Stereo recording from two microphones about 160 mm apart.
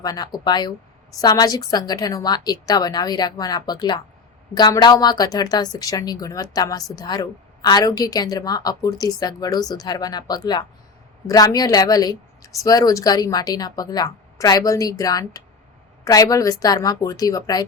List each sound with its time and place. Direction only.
0.0 s a woman's voice: 25° left (ahead or behind)